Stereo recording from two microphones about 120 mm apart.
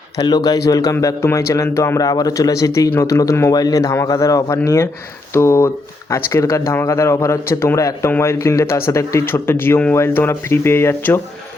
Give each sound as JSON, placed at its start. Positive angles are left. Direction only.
{"t": 0.2, "sound": "speech", "side_deg": 35}